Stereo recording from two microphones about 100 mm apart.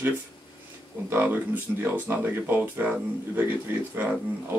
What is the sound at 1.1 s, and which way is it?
Speech, 20° right (ahead or behind).